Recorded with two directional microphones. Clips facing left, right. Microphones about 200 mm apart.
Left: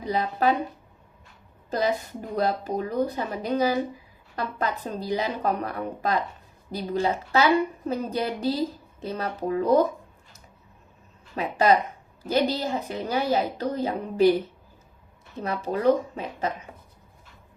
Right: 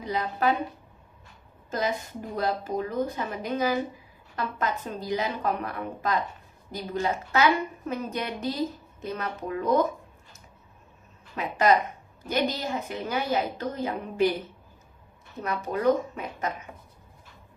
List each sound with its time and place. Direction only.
0.0 s speech: 35° left (ahead or behind)
2.3 s speech: 35° left (ahead or behind)
11.3 s speech: 30° left (ahead or behind)
15.4 s speech: 30° left (ahead or behind)